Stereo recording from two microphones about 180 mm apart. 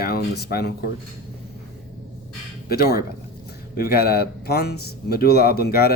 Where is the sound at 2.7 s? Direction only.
60° left (ahead or behind).